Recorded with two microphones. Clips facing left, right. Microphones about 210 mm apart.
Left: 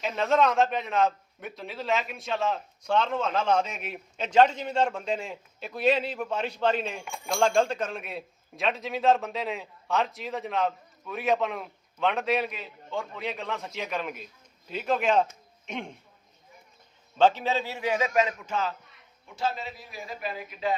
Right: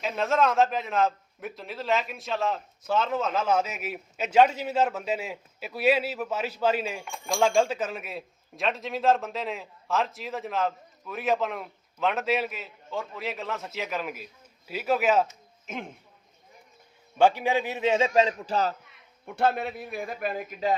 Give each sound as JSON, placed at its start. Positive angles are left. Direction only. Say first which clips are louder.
{"t": 0.0, "sound": "a man's voice", "louder": "left 1 dB", "side_deg": 0}
{"t": 17.2, "sound": "a man's voice", "louder": "right 1 dB", "side_deg": -10}
{"t": 19.2, "sound": "a man's voice", "louder": "right 6 dB", "side_deg": -60}